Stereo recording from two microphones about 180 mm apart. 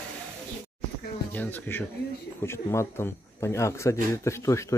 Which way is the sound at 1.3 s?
10° left (ahead or behind).